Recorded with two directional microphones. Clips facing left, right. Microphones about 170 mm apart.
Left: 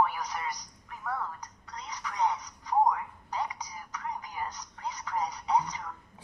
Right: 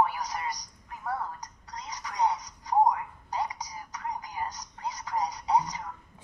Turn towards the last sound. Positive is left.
turn(degrees=-35)  # may be behind; listen again after turning